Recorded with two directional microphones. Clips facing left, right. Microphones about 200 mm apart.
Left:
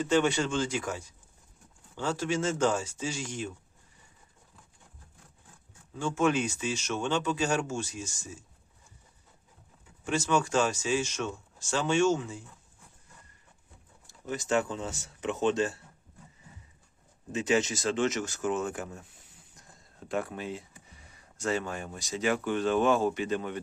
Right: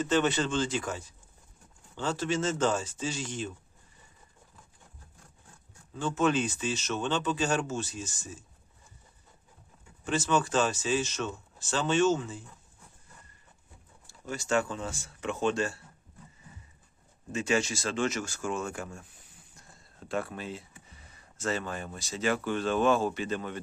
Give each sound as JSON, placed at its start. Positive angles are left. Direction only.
{"t": 0.0, "sound": "speech", "side_deg": 10}
{"t": 6.0, "sound": "speech", "side_deg": 10}
{"t": 10.0, "sound": "speech", "side_deg": 10}
{"t": 14.1, "sound": "speech", "side_deg": 20}
{"t": 17.3, "sound": "speech", "side_deg": 20}